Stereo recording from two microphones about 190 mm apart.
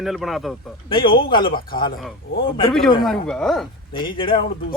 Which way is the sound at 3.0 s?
Centre (ahead or behind).